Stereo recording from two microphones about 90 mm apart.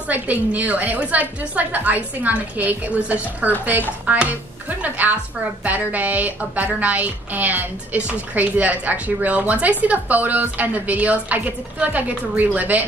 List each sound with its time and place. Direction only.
0.1 s speech: 15° right (ahead or behind)